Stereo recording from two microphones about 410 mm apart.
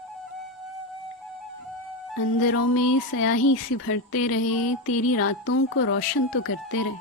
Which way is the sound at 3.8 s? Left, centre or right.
Left.